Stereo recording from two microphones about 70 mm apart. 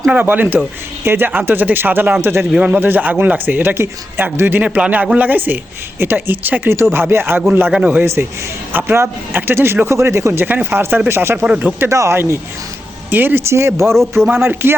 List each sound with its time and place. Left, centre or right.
0.1 s speech: right
2.5 s speech: centre; by 10.4 s right
10.4 s speech: right
11.4 s speech: centre
11.9 s speech: right
14.3 s speech: right